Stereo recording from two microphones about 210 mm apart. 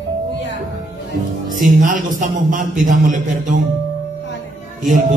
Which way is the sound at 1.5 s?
40° right (ahead or behind).